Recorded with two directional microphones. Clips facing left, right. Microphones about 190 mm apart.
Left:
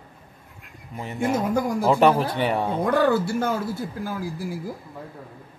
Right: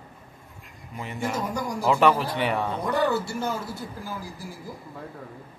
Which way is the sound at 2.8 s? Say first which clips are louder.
Left 5 dB; 55° left (ahead or behind).